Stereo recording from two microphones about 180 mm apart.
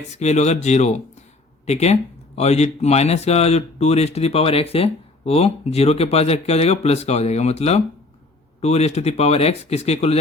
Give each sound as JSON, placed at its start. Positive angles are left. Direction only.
{"t": 0.1, "sound": "speech", "side_deg": 40}